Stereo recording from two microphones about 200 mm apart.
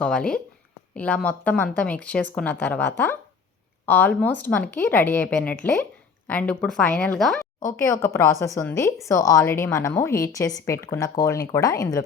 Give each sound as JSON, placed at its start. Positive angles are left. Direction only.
{"t": 0.0, "sound": "a woman's voice", "side_deg": 5}
{"t": 7.8, "sound": "a woman's voice", "side_deg": 15}